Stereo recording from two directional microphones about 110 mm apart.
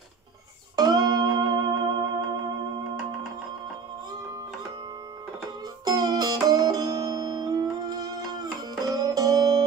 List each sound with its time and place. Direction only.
0.7 s music: 35° right (ahead or behind)
5.9 s music: 35° right (ahead or behind)